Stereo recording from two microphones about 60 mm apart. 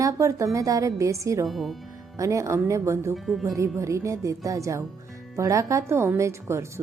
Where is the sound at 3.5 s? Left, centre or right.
Right.